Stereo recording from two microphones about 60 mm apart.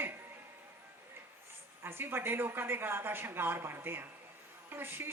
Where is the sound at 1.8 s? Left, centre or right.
Right.